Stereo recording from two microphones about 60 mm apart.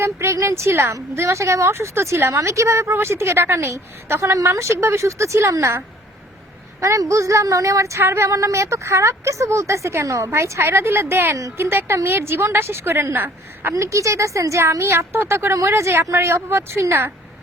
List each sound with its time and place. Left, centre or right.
0.0 s a woman's voice: right
8.0 s a woman's voice: right
8.3 s a woman's voice: right
13.7 s a woman's voice: right
15.6 s a woman's voice: right